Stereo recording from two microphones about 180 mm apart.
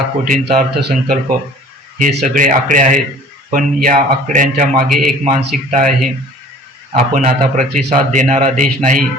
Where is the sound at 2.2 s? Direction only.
45° right (ahead or behind).